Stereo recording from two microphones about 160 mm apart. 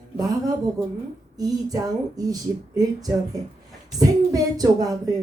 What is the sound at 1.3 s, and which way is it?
A woman's voice, 25° right (ahead or behind).